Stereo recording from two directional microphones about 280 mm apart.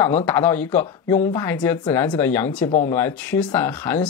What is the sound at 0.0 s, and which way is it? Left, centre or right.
Speech, centre.